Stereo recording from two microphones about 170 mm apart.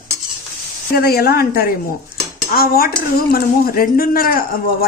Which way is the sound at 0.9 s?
65° left (ahead or behind).